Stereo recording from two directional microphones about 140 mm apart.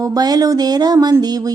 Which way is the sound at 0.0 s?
25° right (ahead or behind).